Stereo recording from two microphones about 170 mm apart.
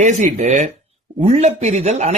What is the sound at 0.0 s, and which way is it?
Speech, 45° right (ahead or behind).